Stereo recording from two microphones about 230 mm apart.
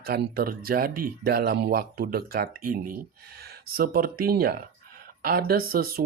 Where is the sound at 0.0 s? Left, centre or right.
Right.